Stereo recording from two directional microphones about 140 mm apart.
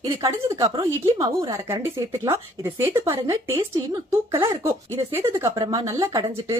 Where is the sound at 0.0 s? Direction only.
30° right (ahead or behind).